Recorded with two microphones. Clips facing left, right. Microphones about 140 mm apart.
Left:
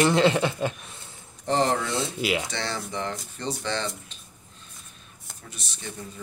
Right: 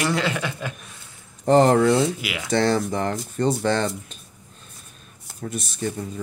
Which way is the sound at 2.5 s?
45° right (ahead or behind).